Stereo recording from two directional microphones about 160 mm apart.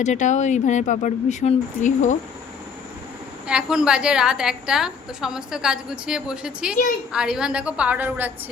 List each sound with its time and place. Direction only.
0.0 s speech: 50° left (ahead or behind)
3.4 s a woman's voice: 5° right (ahead or behind)